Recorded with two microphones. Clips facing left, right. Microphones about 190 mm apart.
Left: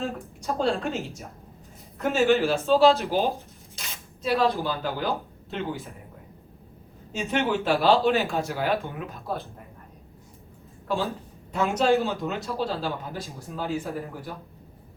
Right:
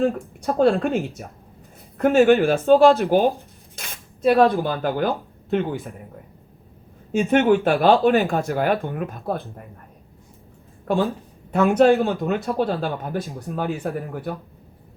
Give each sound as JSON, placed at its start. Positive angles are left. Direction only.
{"t": 0.0, "sound": "speech", "side_deg": -55}
{"t": 7.1, "sound": "speech", "side_deg": -55}
{"t": 10.9, "sound": "speech", "side_deg": -55}